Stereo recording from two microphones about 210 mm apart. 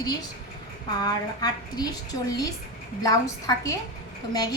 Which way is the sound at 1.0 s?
20° left (ahead or behind).